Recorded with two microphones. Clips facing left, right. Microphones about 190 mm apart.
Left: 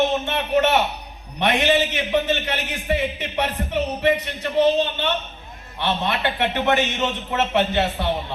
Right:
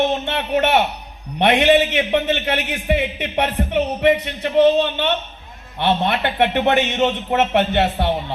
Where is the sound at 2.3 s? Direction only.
60° right (ahead or behind).